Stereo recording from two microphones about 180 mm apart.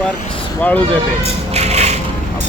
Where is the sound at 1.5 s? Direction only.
35° right (ahead or behind).